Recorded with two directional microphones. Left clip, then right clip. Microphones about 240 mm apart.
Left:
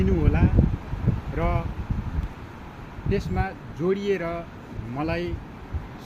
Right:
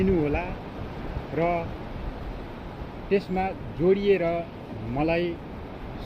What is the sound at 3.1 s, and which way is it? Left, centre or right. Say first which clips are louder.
Speech: right 3 dB; centre.